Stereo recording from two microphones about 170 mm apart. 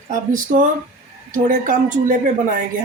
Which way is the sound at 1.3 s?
50° right (ahead or behind).